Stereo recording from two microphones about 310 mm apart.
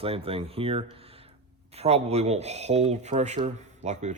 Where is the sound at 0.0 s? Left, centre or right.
Centre.